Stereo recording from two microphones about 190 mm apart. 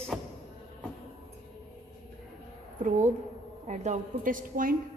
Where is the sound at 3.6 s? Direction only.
40° right (ahead or behind).